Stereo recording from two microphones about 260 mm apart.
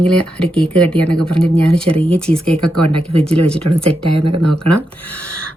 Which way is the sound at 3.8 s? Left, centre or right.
Right.